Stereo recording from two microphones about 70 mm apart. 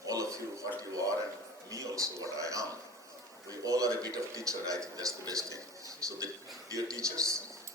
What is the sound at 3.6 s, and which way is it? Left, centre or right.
Speech, right.